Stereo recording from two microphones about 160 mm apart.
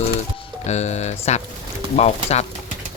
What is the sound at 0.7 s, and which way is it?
Speech, 45° left (ahead or behind).